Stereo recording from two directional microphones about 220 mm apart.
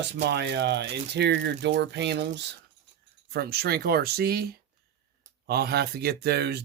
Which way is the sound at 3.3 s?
45° right (ahead or behind).